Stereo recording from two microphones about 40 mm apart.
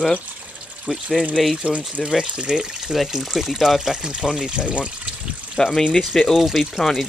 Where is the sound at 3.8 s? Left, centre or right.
Right.